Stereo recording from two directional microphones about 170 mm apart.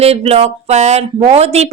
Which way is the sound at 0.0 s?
35° right (ahead or behind).